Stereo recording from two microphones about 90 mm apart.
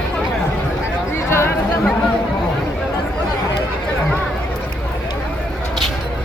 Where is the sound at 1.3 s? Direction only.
30° left (ahead or behind).